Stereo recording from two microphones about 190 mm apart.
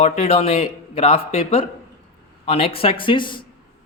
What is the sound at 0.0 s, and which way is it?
Speech, 35° left (ahead or behind).